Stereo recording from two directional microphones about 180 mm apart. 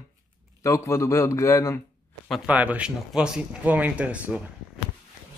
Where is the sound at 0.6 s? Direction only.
15° left (ahead or behind).